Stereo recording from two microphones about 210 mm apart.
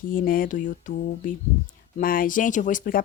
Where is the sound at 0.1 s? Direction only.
45° left (ahead or behind).